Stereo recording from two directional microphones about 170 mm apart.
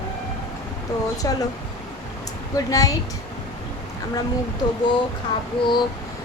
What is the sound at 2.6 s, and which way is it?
Speech, 20° left (ahead or behind).